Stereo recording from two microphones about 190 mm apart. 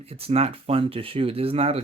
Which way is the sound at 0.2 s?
30° right (ahead or behind).